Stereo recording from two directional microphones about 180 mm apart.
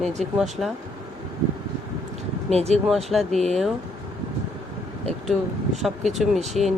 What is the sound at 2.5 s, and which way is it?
Speech, 35° right (ahead or behind).